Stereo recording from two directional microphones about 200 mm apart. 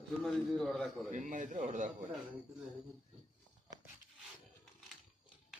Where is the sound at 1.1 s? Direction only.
40° right (ahead or behind).